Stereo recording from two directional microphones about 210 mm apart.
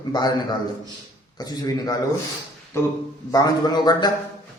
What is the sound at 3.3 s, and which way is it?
Speech, 20° left (ahead or behind).